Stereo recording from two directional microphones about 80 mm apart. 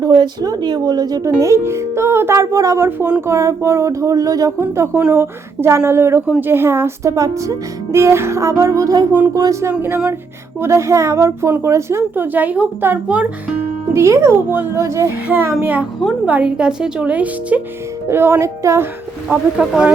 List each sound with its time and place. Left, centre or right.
0.0 s speech: right
1.4 s a woman's voice: right; by 13.2 s centre
13.9 s speech: right
15.6 s a woman's voice: centre
18.1 s speech: right
19.6 s a woman's voice: centre